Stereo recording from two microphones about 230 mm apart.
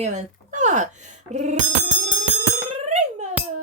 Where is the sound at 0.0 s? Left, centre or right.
Right.